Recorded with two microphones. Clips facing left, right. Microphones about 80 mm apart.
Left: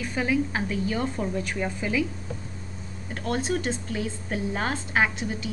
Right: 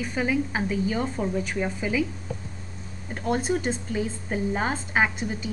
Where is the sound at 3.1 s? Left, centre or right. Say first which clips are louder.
Right 2 dB; centre.